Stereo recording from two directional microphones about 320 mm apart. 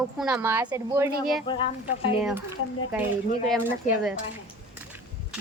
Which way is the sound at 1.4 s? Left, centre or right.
Centre.